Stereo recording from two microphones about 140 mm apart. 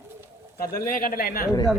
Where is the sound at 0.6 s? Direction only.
90° left.